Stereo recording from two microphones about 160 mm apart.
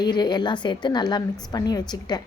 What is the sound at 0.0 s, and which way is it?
A woman's voice, 25° left (ahead or behind).